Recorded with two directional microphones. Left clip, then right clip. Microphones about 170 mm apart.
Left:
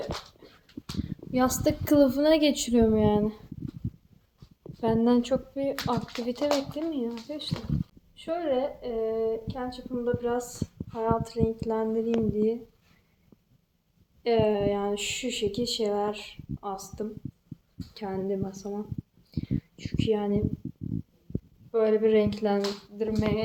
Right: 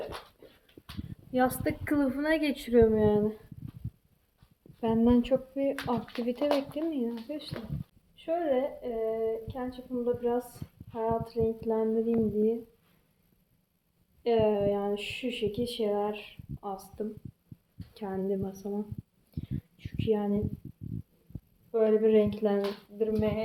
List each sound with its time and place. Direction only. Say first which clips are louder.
1.3 s a woman's voice: left 1 dB; 35° left (ahead or behind)
1.6 s a woman's voice: left 7 dB; 60° left (ahead or behind)
3.0 s speech: left 1 dB; 10° left (ahead or behind)
4.8 s a woman's voice: left 2 dB; 5° right (ahead or behind)
8.1 s a woman's voice: left 1 dB; 5° right (ahead or behind)
14.3 s a woman's voice: left 2 dB; 5° right (ahead or behind)
21.7 s speech: left 1 dB; 15° right (ahead or behind)